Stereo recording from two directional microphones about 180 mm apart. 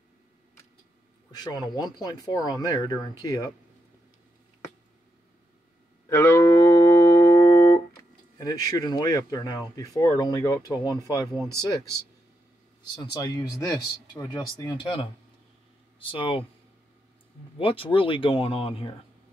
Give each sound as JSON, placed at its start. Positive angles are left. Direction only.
{"t": 1.3, "sound": "speech", "side_deg": 20}
{"t": 6.0, "sound": "a sound", "side_deg": 15}
{"t": 10.9, "sound": "speech", "side_deg": 20}
{"t": 12.9, "sound": "speech", "side_deg": 20}
{"t": 17.6, "sound": "speech", "side_deg": 30}